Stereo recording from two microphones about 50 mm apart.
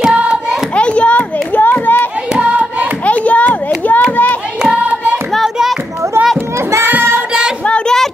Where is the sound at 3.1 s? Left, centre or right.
Left.